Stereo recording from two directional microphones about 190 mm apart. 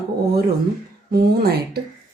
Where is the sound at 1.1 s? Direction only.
55° right (ahead or behind).